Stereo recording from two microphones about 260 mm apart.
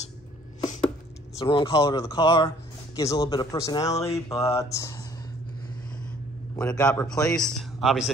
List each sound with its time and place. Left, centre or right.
1.4 s speech: centre
6.5 s a man's voice: centre